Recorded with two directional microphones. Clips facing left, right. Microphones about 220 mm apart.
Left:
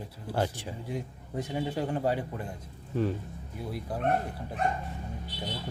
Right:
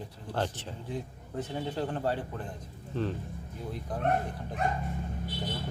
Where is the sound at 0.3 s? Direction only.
10° left (ahead or behind).